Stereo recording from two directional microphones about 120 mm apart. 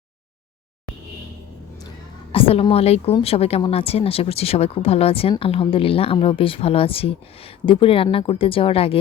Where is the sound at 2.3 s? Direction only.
50° left (ahead or behind).